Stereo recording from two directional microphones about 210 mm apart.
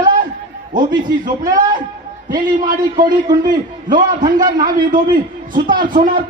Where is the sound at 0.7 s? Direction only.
40° right (ahead or behind).